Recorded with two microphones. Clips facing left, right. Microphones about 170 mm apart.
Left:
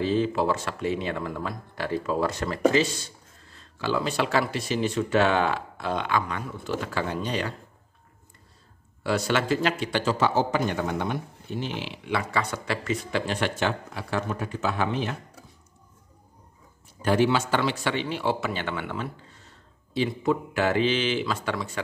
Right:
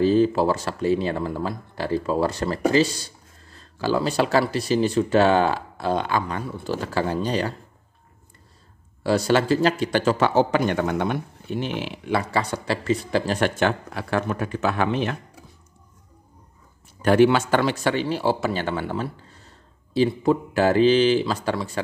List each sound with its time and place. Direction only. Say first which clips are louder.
0.0 s a man's voice: right 6 dB; 40° right (ahead or behind)
9.0 s a man's voice: right 5 dB; 35° right (ahead or behind); by 15.1 s 70° right (ahead or behind)
17.0 s a man's voice: right 6 dB; 65° right (ahead or behind); by 21.8 s 35° right (ahead or behind)